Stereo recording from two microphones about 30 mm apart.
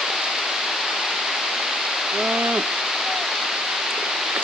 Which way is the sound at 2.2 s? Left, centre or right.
Centre.